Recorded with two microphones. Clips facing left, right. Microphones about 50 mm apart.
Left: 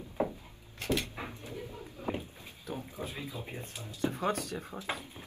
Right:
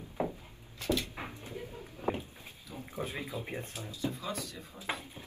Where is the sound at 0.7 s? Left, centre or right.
Left.